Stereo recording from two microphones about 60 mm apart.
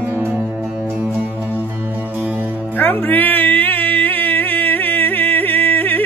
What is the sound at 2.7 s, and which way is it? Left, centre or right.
Music, left.